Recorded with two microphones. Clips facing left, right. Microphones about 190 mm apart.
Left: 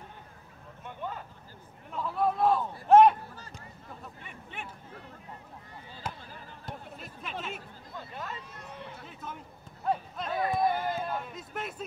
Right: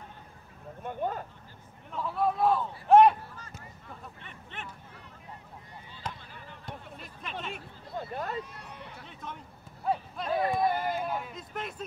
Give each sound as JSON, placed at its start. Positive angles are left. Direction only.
{"t": 0.8, "sound": "speech", "side_deg": -45}
{"t": 1.9, "sound": "a man's voice", "side_deg": 0}
{"t": 4.2, "sound": "speech", "side_deg": 10}
{"t": 6.0, "sound": "basketball bounce", "side_deg": 5}
{"t": 6.6, "sound": "speech", "side_deg": 0}
{"t": 8.1, "sound": "speech", "side_deg": -45}
{"t": 8.9, "sound": "speech", "side_deg": 5}
{"t": 10.8, "sound": "a sound", "side_deg": -10}
{"t": 11.3, "sound": "speech", "side_deg": 5}